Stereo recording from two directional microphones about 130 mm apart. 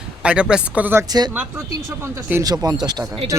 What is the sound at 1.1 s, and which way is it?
Speech, 30° right (ahead or behind).